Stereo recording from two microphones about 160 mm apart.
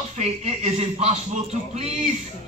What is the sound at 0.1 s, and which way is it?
A man's voice, 45° right (ahead or behind).